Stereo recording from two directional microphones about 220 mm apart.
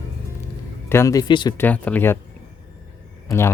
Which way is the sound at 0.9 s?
15° left (ahead or behind).